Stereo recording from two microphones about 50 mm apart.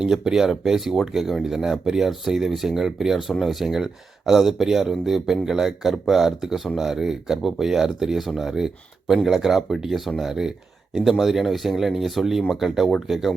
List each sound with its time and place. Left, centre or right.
0.0 s speech: centre